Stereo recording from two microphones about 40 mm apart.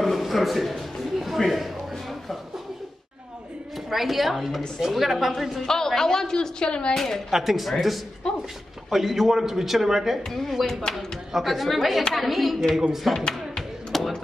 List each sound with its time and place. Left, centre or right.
0.0 s a sound: centre
3.9 s a woman's voice: centre
5.7 s speech: centre
7.2 s a woman's voice: centre
8.2 s speech: left
8.9 s a man's voice: centre
10.7 s speech: centre
11.3 s a woman's voice: centre
13.9 s a sound: centre